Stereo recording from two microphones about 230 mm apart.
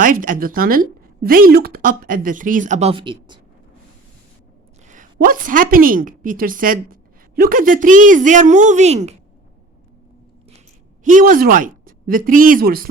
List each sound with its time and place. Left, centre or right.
0.0 s a woman's voice: right
4.9 s a woman's voice: right
11.0 s speech: right